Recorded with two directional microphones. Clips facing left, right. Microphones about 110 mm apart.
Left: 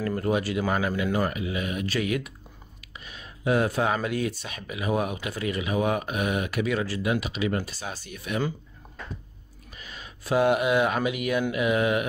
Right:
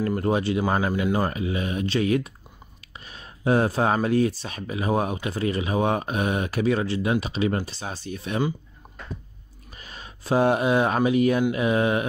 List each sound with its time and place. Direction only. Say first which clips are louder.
0.0 s speech: right 3 dB; 30° right (ahead or behind)
9.8 s speech: right 1 dB; 35° right (ahead or behind)